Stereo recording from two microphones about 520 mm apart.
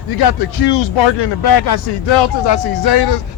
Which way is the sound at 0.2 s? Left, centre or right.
Left.